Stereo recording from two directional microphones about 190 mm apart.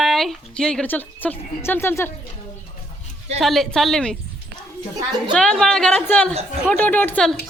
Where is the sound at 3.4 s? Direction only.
Centre (ahead or behind).